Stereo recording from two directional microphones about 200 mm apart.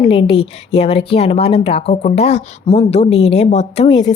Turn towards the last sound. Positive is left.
turn(degrees=30)  # may be behind; listen again after turning